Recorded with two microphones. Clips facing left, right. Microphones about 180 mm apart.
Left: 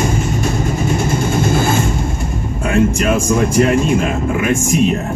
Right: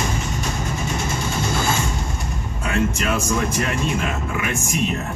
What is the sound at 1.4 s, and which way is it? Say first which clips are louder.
Vehicle: left 6 dB; 55° left (ahead or behind).